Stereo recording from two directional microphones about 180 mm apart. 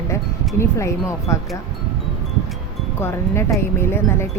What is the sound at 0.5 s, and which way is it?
Speech, 15° left (ahead or behind).